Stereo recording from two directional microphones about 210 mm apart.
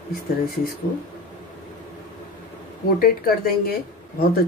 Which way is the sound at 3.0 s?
45° left (ahead or behind).